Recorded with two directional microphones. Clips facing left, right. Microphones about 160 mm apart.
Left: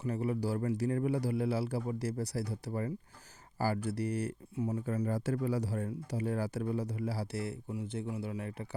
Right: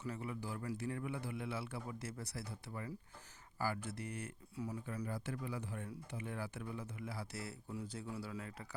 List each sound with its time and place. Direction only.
0.0 s speech: 35° left (ahead or behind)
4.5 s speech: 25° left (ahead or behind)
4.9 s speech: 45° left (ahead or behind); by 8.6 s 25° left (ahead or behind)